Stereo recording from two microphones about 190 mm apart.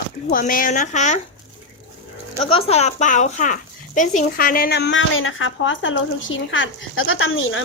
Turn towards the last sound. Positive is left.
turn(degrees=90)